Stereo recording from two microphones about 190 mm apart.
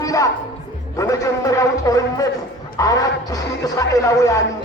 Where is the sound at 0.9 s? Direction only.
15° left (ahead or behind).